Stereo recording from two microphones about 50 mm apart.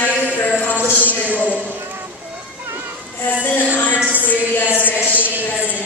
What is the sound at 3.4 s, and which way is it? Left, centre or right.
Music, left.